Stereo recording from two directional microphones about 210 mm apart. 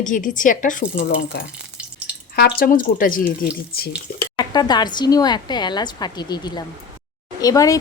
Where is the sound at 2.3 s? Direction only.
45° left (ahead or behind).